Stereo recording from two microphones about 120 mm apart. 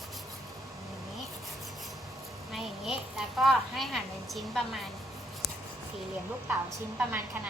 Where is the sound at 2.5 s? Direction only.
5° right (ahead or behind).